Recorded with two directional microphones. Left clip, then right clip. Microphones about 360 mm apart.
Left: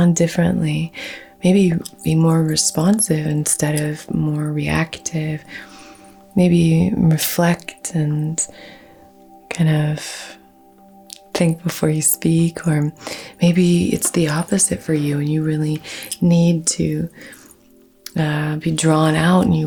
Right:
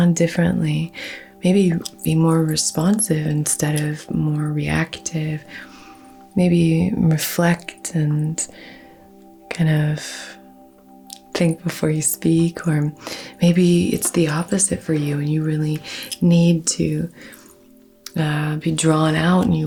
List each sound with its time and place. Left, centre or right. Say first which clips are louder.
0.0 s speech: left 1 dB; left